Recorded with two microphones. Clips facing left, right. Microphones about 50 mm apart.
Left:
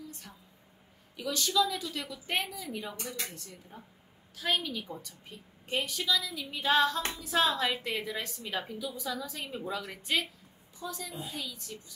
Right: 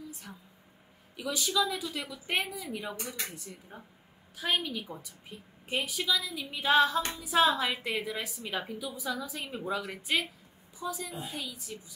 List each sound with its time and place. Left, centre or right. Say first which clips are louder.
1.1 s a woman's voice: left 1 dB; centre